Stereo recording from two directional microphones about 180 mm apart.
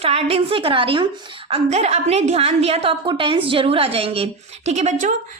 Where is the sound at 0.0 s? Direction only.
35° right (ahead or behind).